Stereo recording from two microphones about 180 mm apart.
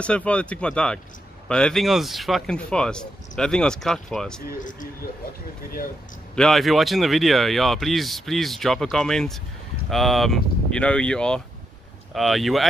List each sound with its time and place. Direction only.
0.0 s speech: 5° left (ahead or behind)
4.5 s speech: 45° left (ahead or behind)
6.3 s speech: centre (ahead or behind)